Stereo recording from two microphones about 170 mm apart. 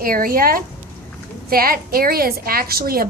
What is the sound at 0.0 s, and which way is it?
A woman's voice, 55° right (ahead or behind).